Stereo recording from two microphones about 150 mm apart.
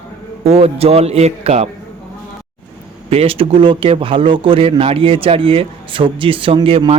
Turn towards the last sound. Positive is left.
turn(degrees=-40)  # may be behind; listen again after turning